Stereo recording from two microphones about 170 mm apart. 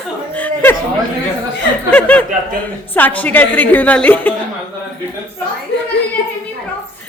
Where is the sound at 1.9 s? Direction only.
5° left (ahead or behind).